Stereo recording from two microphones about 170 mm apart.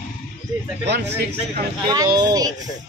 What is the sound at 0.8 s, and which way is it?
Speech, 85° right.